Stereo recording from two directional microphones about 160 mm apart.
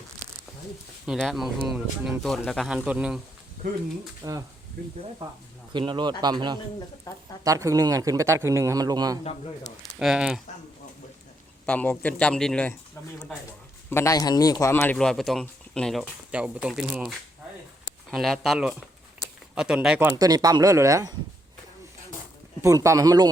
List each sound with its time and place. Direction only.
1.0 s speech: centre (ahead or behind)
4.2 s speech: 20° right (ahead or behind)
4.8 s speech: 65° right (ahead or behind)
5.7 s speech: 30° right (ahead or behind)
7.1 s speech: 20° left (ahead or behind)
7.4 s speech: 20° right (ahead or behind)
10.0 s speech: 5° right (ahead or behind)
11.6 s a man's voice: 10° left (ahead or behind)
13.9 s speech: 20° left (ahead or behind)
14.9 s speech: 5° left (ahead or behind)
20.1 s speech: 25° right (ahead or behind)
22.6 s speech: 20° right (ahead or behind)